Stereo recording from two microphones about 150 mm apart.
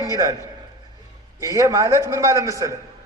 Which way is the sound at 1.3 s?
20° right (ahead or behind).